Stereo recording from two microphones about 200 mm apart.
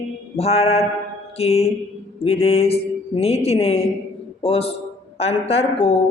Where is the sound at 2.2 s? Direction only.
30° left (ahead or behind).